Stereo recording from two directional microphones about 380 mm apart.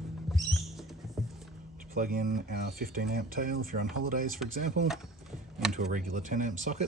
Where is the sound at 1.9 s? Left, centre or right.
Right.